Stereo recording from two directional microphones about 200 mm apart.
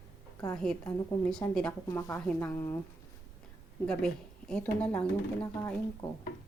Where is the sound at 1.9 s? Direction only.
15° left (ahead or behind).